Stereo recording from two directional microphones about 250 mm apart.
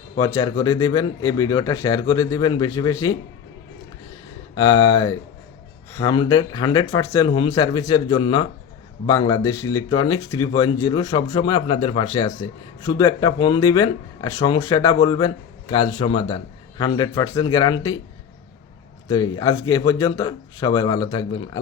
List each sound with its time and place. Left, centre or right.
0.2 s speech: centre
4.5 s speech: centre
19.0 s speech: centre